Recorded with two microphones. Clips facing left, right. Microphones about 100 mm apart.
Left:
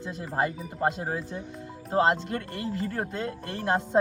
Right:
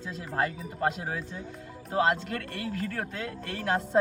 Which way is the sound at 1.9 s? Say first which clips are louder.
Left 2 dB; 30° left (ahead or behind).